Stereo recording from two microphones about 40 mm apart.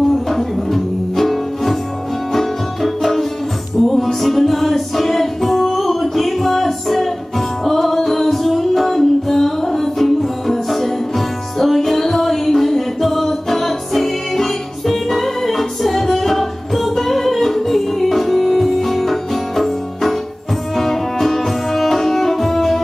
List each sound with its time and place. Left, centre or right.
0.3 s music: centre